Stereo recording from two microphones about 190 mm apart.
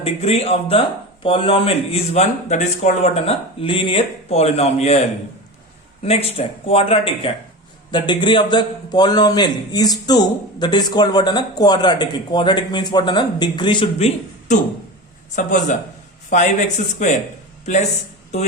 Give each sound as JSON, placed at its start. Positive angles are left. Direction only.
{"t": 0.0, "sound": "speech", "side_deg": 30}
{"t": 6.0, "sound": "a man's voice", "side_deg": 30}
{"t": 14.5, "sound": "speech", "side_deg": 40}
{"t": 18.3, "sound": "speech", "side_deg": 35}